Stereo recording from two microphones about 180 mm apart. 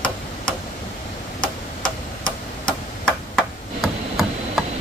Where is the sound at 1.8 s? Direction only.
5° left (ahead or behind).